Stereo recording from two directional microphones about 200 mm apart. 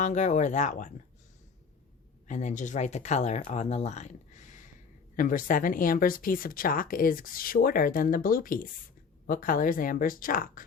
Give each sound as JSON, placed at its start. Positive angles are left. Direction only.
{"t": 0.0, "sound": "speech", "side_deg": 35}
{"t": 2.2, "sound": "speech", "side_deg": 35}